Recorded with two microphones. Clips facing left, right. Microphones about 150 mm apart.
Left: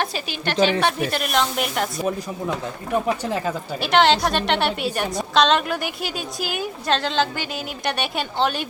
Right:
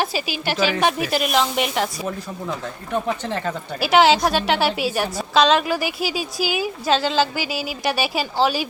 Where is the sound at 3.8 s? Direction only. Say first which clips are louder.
Right 2 dB; 5° right (ahead or behind).